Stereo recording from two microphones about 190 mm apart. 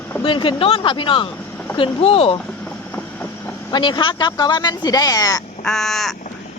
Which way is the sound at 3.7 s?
25° left (ahead or behind).